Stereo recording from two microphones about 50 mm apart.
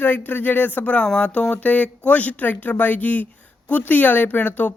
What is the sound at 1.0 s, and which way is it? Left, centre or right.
Speech, centre.